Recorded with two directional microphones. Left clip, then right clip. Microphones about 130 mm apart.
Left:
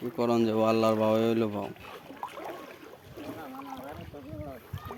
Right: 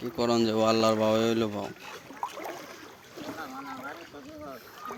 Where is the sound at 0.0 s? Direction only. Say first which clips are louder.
Right 1 dB; 15° left (ahead or behind).